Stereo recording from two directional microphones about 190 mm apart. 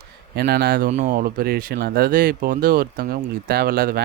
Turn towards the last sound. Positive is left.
turn(degrees=-55)  # may be behind; listen again after turning